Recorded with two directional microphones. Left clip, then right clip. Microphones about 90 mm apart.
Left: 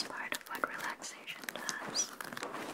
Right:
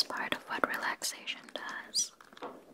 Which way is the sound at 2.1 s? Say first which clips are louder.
Left 4 dB; 40° left (ahead or behind).